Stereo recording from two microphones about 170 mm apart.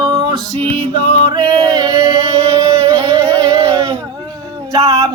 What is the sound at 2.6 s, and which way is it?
Singing, 30° right (ahead or behind).